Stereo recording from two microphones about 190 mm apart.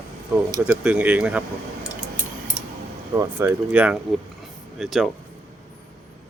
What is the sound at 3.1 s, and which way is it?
Speech, 10° right (ahead or behind).